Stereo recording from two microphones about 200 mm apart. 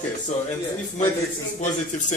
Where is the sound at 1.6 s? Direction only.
40° left (ahead or behind).